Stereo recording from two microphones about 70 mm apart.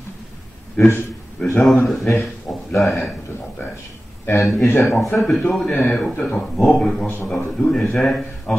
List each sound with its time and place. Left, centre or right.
0.7 s a man's voice: left
1.4 s a man's voice: centre
4.4 s a man's voice: centre